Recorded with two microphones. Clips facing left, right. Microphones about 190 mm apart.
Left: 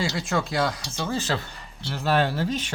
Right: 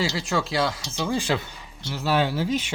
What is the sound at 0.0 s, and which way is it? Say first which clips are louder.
Speech: right 1 dB; centre (ahead or behind).